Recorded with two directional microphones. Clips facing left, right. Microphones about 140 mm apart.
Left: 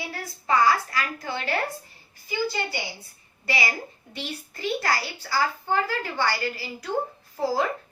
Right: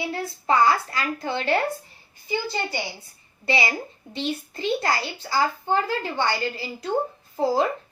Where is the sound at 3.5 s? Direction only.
25° right (ahead or behind).